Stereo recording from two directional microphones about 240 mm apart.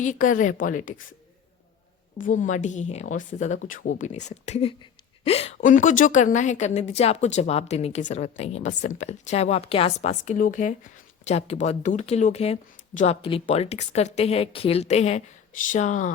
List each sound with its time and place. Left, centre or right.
0.0 s a woman's voice: left
2.1 s a woman's voice: left